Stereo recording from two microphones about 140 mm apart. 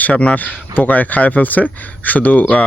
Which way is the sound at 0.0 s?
10° left (ahead or behind).